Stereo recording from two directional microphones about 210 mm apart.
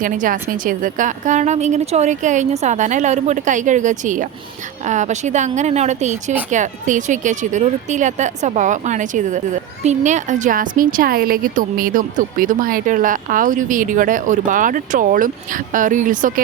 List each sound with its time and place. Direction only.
0.0 s a woman's voice: 40° right (ahead or behind)